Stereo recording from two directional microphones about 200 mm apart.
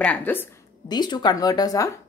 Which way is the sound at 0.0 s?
10° left (ahead or behind).